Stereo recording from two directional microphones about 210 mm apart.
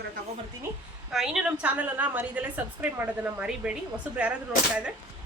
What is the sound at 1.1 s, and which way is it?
A woman's voice, 5° right (ahead or behind).